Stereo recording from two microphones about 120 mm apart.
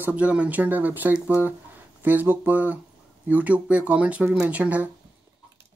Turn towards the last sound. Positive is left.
turn(degrees=-15)  # may be behind; listen again after turning